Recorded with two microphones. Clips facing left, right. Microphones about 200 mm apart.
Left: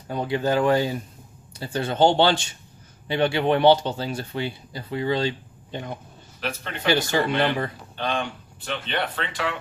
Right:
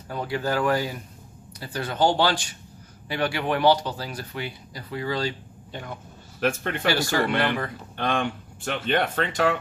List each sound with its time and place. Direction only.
0.1 s speech: 20° left (ahead or behind)
6.4 s speech: 50° right (ahead or behind)
6.8 s speech: 20° left (ahead or behind)
7.9 s speech: 55° right (ahead or behind)